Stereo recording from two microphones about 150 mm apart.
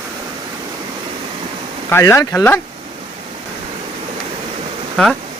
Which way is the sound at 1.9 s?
20° left (ahead or behind).